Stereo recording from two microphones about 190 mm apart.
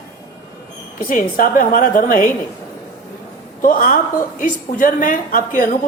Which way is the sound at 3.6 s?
45° left (ahead or behind).